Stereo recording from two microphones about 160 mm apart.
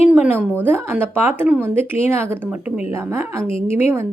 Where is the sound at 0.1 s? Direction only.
10° right (ahead or behind).